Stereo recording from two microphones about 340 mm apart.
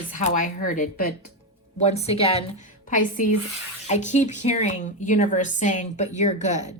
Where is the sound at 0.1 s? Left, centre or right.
Left.